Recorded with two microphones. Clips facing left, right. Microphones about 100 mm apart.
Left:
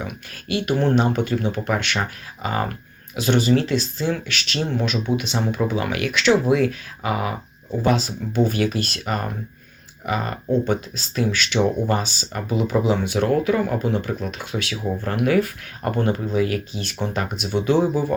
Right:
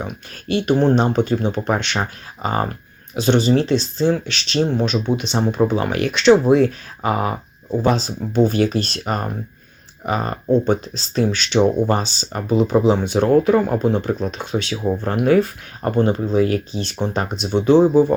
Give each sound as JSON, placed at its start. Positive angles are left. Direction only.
{"t": 0.0, "sound": "speech", "side_deg": -35}